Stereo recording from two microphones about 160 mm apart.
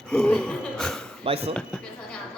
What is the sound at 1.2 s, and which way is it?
Speech, 35° right (ahead or behind).